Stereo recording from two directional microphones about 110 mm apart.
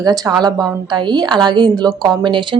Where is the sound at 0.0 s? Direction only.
35° right (ahead or behind).